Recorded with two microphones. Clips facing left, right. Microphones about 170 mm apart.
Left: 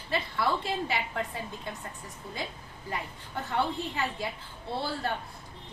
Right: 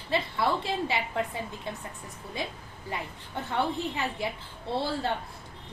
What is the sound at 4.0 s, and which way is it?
Speech, 25° right (ahead or behind).